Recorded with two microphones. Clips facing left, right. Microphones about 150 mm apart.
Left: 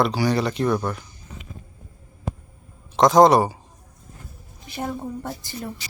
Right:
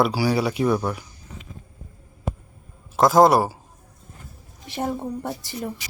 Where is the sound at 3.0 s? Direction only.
5° right (ahead or behind).